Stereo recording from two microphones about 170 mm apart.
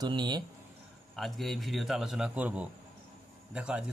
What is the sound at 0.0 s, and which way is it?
Speech, 25° right (ahead or behind).